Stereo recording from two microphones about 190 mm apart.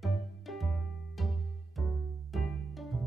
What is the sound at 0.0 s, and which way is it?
Music, centre (ahead or behind).